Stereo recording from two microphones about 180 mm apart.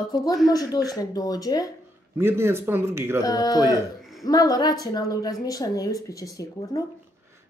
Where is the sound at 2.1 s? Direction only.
15° right (ahead or behind).